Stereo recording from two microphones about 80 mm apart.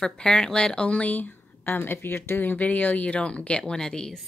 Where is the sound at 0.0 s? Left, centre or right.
Centre.